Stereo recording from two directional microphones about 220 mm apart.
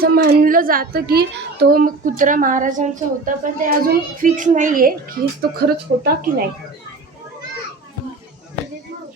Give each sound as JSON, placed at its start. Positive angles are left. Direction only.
{"t": 0.0, "sound": "a woman's voice", "side_deg": -40}